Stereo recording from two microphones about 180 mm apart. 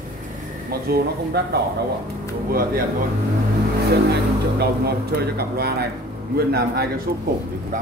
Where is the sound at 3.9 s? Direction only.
60° right (ahead or behind).